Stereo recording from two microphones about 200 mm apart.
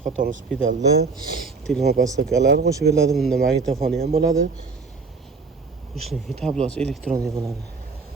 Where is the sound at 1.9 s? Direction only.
55° right (ahead or behind).